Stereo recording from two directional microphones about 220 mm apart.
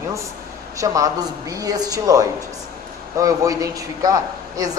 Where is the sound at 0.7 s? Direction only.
15° right (ahead or behind).